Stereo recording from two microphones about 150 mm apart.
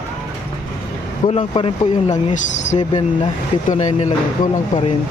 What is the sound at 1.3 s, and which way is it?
Speech, 40° left (ahead or behind).